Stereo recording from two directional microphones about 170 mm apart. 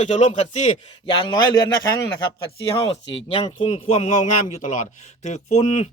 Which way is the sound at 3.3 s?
30° left (ahead or behind).